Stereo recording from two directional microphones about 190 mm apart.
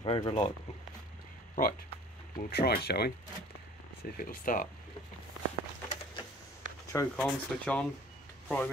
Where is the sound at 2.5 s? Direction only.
55° left (ahead or behind).